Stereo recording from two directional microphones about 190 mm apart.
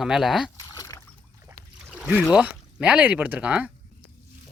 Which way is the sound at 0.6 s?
20° left (ahead or behind).